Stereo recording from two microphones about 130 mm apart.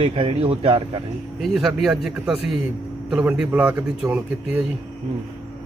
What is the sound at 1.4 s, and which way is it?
Speech, centre (ahead or behind).